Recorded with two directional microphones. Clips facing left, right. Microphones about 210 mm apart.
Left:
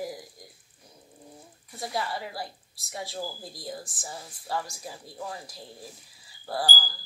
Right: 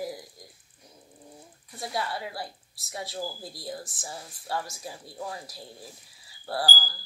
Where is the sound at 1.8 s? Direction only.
Centre (ahead or behind).